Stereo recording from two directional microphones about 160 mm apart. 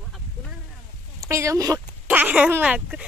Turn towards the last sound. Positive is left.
turn(degrees=-5)  # may be behind; listen again after turning